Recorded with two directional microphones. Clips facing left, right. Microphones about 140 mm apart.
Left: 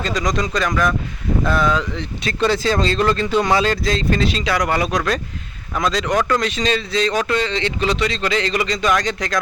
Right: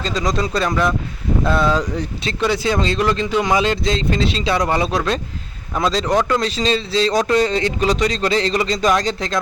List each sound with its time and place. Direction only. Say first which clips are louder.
0.0 s speech: even; 25° right (ahead or behind)
2.4 s speech: left 1 dB; 15° right (ahead or behind); by 9.4 s 30° right (ahead or behind)